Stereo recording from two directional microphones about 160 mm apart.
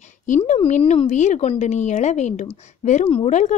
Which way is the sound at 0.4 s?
45° left (ahead or behind).